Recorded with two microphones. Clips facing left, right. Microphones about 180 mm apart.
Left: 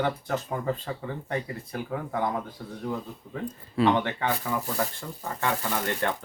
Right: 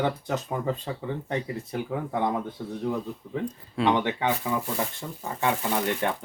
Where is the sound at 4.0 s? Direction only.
15° right (ahead or behind).